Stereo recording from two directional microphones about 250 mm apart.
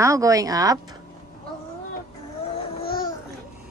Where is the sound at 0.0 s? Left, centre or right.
Centre.